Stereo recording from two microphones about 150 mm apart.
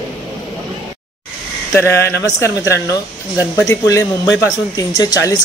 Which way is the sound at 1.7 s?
20° left (ahead or behind).